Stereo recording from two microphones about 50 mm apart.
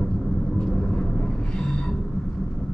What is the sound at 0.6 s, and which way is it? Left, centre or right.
Vehicle, centre.